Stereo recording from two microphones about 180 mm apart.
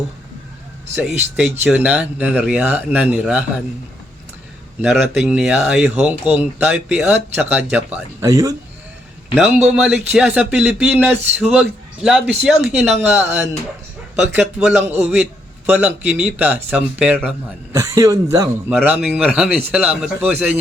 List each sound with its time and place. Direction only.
0.9 s a man's voice: centre (ahead or behind)
4.8 s speech: 5° right (ahead or behind)
8.2 s speech: 20° right (ahead or behind)
9.3 s a man's voice: centre (ahead or behind)